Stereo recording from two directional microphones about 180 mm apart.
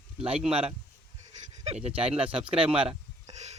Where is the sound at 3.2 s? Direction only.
40° right (ahead or behind).